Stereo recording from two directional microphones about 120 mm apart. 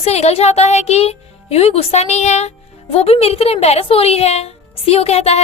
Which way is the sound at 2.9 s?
55° left (ahead or behind).